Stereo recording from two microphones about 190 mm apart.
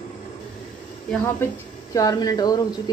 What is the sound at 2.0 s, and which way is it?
Speech, 20° left (ahead or behind).